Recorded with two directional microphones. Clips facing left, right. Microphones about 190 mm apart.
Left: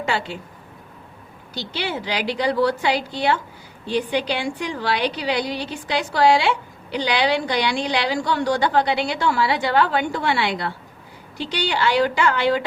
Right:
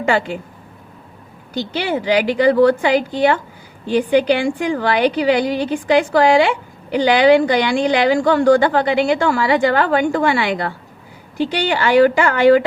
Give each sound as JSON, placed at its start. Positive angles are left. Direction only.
{"t": 1.5, "sound": "a woman's voice", "side_deg": -50}